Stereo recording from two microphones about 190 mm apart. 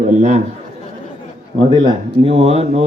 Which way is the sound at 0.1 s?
35° right (ahead or behind).